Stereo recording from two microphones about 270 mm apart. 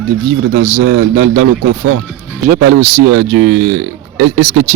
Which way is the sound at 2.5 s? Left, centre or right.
Right.